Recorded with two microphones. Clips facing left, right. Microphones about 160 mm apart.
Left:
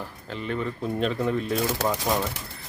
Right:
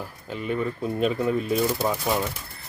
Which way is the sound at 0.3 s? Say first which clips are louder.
Right 3 dB; 10° right (ahead or behind).